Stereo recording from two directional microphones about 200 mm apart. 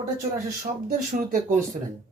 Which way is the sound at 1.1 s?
40° right (ahead or behind).